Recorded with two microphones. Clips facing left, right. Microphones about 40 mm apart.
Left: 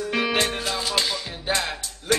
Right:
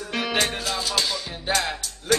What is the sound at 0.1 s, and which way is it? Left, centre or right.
Music, centre.